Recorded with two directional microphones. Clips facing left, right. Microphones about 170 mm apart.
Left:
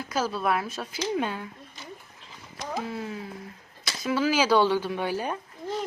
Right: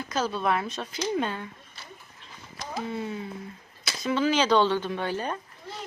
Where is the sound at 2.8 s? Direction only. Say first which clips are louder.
Right 1 dB; centre (ahead or behind).